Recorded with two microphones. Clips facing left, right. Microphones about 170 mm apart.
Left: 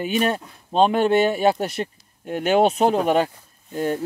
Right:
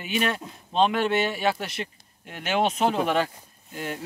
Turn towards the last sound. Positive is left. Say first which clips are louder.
# left 9 dB
turn(degrees=40)  # may be behind; listen again after turning